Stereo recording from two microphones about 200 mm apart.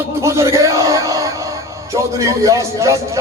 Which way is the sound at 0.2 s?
15° right (ahead or behind).